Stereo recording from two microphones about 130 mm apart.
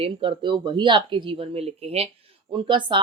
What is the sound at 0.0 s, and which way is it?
Speech, 40° right (ahead or behind).